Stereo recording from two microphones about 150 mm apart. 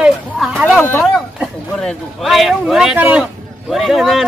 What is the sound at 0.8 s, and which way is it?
Speech, 15° left (ahead or behind).